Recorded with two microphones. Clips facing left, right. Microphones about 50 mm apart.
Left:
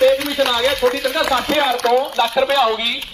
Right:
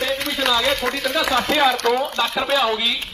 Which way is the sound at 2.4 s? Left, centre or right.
Centre.